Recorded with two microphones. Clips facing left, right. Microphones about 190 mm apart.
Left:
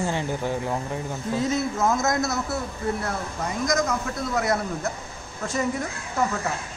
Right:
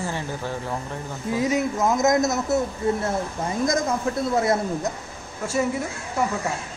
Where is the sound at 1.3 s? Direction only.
15° right (ahead or behind).